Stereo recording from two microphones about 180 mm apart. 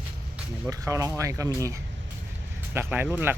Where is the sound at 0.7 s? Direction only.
20° right (ahead or behind).